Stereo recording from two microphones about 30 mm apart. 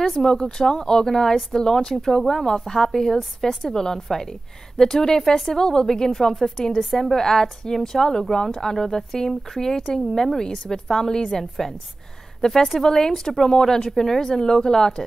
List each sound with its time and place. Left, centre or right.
0.0 s speech: centre
0.3 s a woman's voice: left
3.7 s speech: left
4.1 s a woman's voice: centre
6.1 s a woman's voice: centre